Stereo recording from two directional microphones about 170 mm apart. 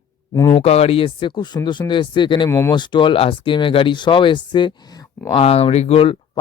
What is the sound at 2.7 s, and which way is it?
Speech, 25° left (ahead or behind).